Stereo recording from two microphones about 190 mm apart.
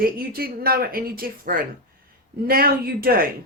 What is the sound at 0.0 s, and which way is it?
Speech, 50° right (ahead or behind).